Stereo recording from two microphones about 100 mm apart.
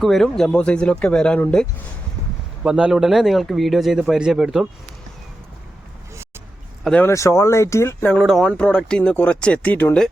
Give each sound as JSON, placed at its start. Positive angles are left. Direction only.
{"t": 0.0, "sound": "speech", "side_deg": 5}
{"t": 2.6, "sound": "speech", "side_deg": -10}
{"t": 7.0, "sound": "speech", "side_deg": 30}
{"t": 8.2, "sound": "speech", "side_deg": 0}